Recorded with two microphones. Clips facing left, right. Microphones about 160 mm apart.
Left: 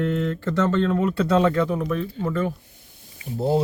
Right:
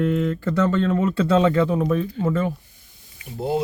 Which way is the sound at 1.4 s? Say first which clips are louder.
Right 2 dB; 25° right (ahead or behind).